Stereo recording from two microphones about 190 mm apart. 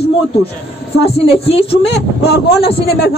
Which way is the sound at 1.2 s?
30° left (ahead or behind).